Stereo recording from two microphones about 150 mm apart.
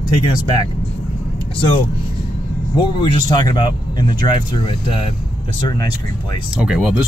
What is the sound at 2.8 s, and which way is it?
Speech, 30° left (ahead or behind).